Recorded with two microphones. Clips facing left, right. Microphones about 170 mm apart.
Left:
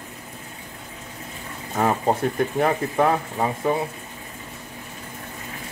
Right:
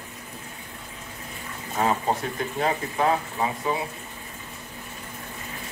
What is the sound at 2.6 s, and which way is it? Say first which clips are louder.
Speech: left 2 dB; 50° left (ahead or behind).